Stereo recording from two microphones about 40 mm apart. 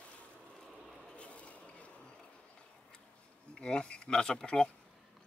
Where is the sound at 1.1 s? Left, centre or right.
Left.